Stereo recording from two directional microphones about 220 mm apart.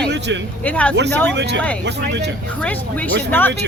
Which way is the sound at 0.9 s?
50° right (ahead or behind).